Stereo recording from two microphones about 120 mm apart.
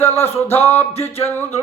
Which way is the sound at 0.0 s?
20° left (ahead or behind).